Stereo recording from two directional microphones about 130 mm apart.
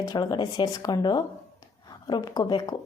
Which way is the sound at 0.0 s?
30° left (ahead or behind).